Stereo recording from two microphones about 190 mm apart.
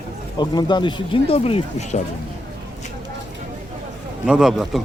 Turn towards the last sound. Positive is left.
turn(degrees=-5)  # may be behind; listen again after turning